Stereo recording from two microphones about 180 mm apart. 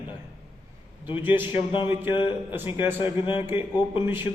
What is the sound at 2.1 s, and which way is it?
Speech, 30° left (ahead or behind).